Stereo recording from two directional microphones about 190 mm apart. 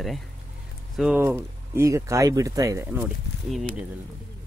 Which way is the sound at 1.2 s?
15° right (ahead or behind).